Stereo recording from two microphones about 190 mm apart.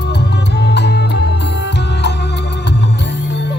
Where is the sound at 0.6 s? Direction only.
60° left (ahead or behind).